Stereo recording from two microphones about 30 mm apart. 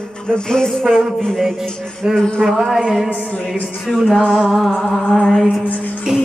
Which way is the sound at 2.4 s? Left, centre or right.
Centre.